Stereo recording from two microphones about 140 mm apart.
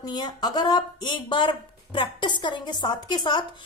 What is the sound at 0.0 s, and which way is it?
A woman's voice, 30° left (ahead or behind).